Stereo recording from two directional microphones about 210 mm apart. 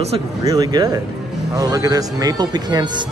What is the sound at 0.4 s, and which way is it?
Speech, 20° right (ahead or behind).